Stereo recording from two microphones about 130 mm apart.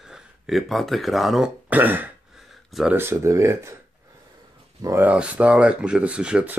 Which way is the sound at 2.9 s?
20° right (ahead or behind).